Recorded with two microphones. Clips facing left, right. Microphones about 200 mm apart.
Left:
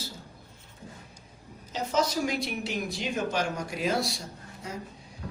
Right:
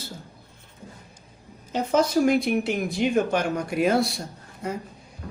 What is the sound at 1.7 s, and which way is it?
Speech, 55° right (ahead or behind).